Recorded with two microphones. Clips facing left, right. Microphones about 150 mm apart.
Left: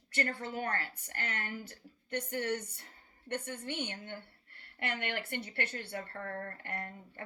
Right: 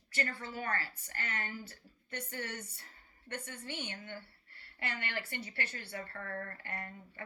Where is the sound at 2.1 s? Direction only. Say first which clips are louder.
Left 8 dB; 60° left (ahead or behind).